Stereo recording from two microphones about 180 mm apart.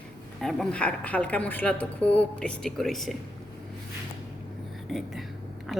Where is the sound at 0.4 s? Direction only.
5° left (ahead or behind).